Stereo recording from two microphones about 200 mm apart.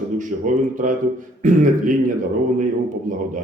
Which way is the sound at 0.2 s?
40° right (ahead or behind).